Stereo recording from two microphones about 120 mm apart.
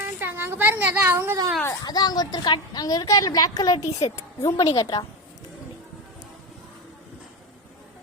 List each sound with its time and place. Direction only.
0.0 s a sound: 20° right (ahead or behind)
1.6 s a woman's voice: 30° left (ahead or behind)
4.7 s a woman's voice: 35° left (ahead or behind)